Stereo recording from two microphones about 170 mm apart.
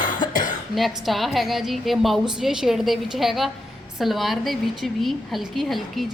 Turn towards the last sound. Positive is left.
turn(degrees=0)  # may be behind; listen again after turning